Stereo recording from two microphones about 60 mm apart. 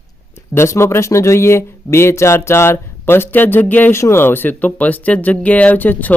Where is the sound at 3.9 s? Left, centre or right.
Left.